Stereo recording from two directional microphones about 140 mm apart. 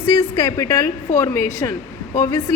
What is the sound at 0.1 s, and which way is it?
A woman's voice, 25° left (ahead or behind).